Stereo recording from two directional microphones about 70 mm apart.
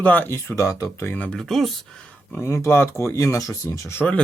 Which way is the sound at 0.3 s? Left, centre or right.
Left.